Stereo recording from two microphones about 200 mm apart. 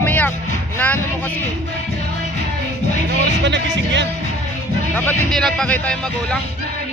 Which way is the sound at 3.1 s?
60° right (ahead or behind).